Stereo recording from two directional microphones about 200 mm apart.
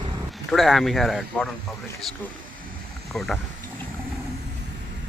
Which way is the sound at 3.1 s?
Centre (ahead or behind).